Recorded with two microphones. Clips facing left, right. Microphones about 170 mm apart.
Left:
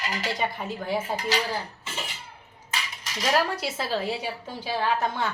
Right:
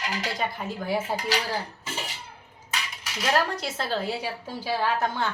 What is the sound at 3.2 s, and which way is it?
A woman's voice, centre (ahead or behind).